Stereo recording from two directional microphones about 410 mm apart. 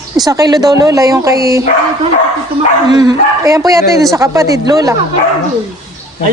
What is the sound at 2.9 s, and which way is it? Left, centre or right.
A man's voice, centre.